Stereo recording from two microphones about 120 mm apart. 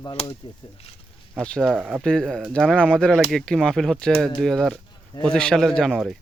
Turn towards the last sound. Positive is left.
turn(degrees=0)  # may be behind; listen again after turning